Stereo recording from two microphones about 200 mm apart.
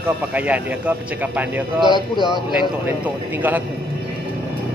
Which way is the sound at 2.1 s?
20° left (ahead or behind).